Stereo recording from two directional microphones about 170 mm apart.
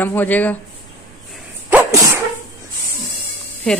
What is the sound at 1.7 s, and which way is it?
Sneeze, 15° right (ahead or behind).